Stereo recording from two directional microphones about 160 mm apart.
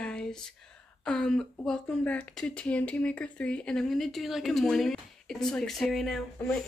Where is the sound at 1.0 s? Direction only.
5° left (ahead or behind).